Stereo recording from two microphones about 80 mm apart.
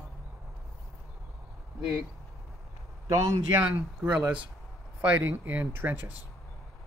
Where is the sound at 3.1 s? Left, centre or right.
Right.